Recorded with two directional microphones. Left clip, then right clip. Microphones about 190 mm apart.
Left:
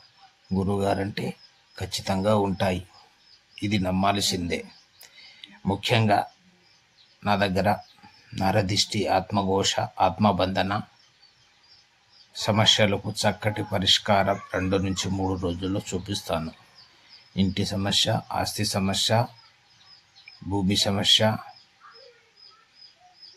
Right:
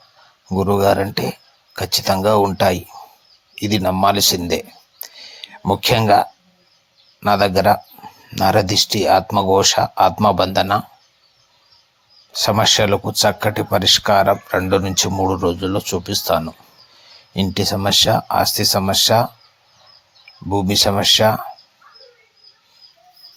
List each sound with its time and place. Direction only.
0.4 s speech: 25° right (ahead or behind)
12.3 s speech: 25° right (ahead or behind)
20.5 s speech: 20° right (ahead or behind)